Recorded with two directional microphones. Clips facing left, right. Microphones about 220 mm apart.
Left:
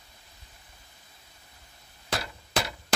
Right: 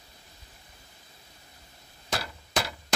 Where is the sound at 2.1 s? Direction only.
Centre (ahead or behind).